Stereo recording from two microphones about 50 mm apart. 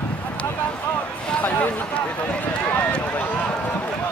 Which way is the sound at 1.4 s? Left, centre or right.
Left.